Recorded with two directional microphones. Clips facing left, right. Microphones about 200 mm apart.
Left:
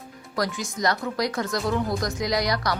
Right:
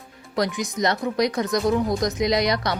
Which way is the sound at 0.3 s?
20° right (ahead or behind).